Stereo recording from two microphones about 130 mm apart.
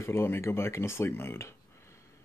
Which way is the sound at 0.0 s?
20° left (ahead or behind).